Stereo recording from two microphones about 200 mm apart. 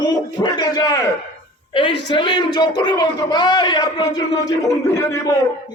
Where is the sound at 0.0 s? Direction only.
20° left (ahead or behind).